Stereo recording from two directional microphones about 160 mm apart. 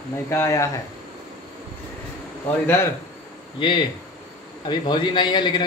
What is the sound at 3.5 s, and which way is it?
A man's voice, 30° left (ahead or behind).